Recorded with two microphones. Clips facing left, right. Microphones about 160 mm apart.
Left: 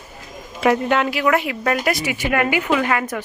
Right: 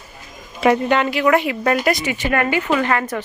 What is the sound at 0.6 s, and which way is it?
Speech, centre (ahead or behind).